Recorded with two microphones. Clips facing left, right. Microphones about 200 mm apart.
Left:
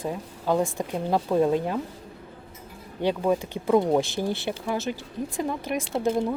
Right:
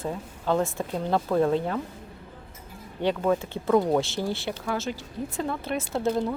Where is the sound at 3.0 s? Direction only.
15° left (ahead or behind).